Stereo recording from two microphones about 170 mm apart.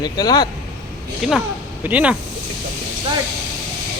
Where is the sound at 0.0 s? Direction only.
20° left (ahead or behind).